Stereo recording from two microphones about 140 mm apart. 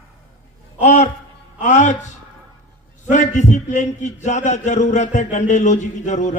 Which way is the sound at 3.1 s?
60° left (ahead or behind).